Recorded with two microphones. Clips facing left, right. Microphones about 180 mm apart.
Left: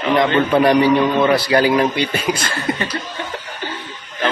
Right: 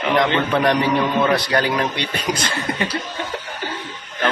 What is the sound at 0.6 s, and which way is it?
A man's voice, 5° left (ahead or behind).